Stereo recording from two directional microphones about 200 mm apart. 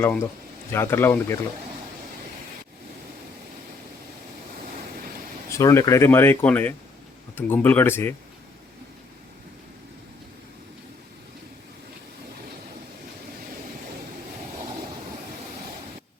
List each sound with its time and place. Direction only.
0.0 s speech: 10° left (ahead or behind)
5.5 s speech: 15° left (ahead or behind)